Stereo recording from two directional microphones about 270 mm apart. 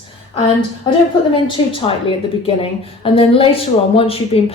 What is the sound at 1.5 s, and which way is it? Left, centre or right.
A woman's voice, centre.